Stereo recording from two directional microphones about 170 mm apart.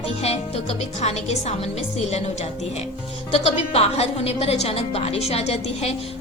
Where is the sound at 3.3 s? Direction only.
35° left (ahead or behind).